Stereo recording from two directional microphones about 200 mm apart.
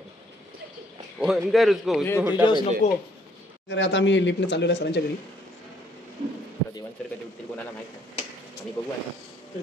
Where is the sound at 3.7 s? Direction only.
65° left (ahead or behind).